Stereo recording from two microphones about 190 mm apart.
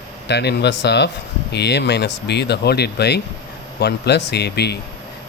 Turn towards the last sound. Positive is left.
turn(degrees=60)  # may be behind; listen again after turning